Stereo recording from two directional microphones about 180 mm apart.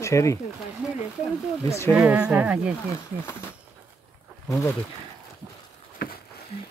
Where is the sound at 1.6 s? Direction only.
15° left (ahead or behind).